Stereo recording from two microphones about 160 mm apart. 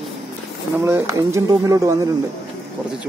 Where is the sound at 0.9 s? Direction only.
15° right (ahead or behind).